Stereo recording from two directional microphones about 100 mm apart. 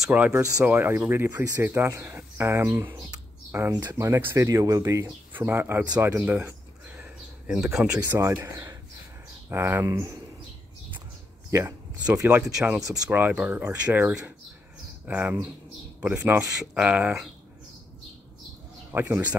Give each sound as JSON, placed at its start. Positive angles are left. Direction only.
{"t": 0.1, "sound": "speech", "side_deg": -15}
{"t": 5.3, "sound": "speech", "side_deg": -20}
{"t": 5.9, "sound": "a sound", "side_deg": -15}
{"t": 7.4, "sound": "speech", "side_deg": -5}
{"t": 8.1, "sound": "speech", "side_deg": -25}
{"t": 11.5, "sound": "speech", "side_deg": -30}
{"t": 12.0, "sound": "speech", "side_deg": -15}
{"t": 18.9, "sound": "speech", "side_deg": -20}